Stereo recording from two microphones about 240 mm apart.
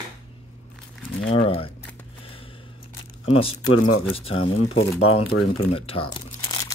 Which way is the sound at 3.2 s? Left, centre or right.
Left.